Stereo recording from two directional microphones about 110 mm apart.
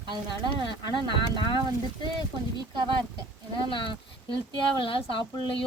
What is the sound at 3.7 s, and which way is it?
Speech, 50° left (ahead or behind).